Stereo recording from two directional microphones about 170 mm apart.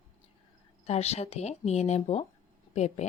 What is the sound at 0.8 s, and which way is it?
Speech, 40° left (ahead or behind).